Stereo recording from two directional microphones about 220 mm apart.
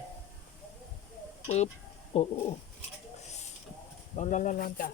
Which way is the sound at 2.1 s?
30° left (ahead or behind).